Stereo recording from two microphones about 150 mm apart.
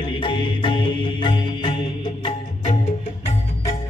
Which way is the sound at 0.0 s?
30° left (ahead or behind).